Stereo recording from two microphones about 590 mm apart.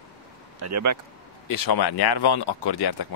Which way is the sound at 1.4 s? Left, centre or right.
Left.